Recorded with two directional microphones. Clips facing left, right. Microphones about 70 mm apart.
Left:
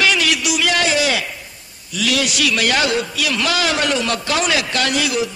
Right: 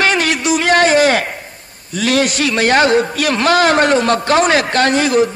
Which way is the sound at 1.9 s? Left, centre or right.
Right.